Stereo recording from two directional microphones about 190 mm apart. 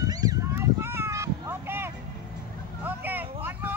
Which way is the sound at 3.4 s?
10° right (ahead or behind).